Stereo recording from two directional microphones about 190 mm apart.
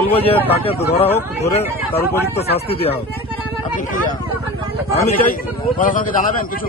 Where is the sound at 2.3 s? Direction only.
30° left (ahead or behind).